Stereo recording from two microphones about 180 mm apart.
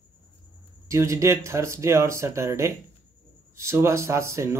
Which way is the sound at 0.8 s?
15° right (ahead or behind).